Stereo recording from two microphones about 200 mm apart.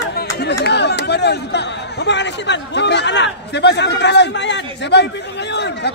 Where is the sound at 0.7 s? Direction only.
55° left (ahead or behind).